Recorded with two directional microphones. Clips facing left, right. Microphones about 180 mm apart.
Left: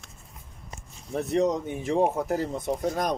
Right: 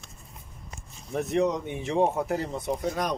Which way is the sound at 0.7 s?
35° left (ahead or behind).